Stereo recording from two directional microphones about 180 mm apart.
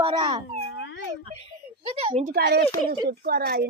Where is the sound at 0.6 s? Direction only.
80° left.